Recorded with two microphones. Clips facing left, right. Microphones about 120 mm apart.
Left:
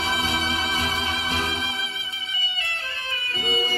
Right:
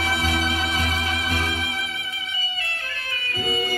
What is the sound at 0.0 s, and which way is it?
Music, 25° left (ahead or behind).